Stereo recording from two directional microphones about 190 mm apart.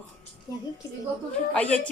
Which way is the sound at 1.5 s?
5° left (ahead or behind).